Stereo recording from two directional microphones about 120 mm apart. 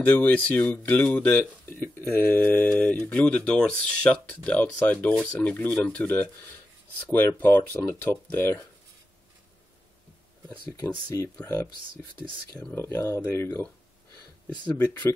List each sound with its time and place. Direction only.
0.0 s speech: 15° left (ahead or behind)
12.7 s speech: 20° left (ahead or behind)